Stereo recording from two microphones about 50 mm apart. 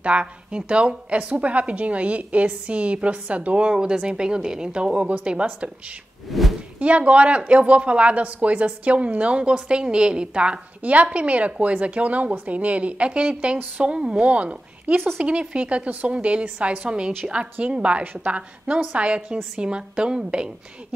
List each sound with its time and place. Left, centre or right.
0.0 s speech: right
6.3 s a sound: centre
6.8 s speech: right